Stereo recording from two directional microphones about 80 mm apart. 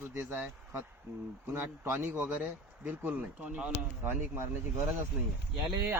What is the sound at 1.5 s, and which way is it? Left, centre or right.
A man's voice, right.